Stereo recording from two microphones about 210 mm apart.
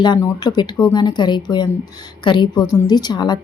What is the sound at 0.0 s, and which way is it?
A woman's voice, 20° left (ahead or behind).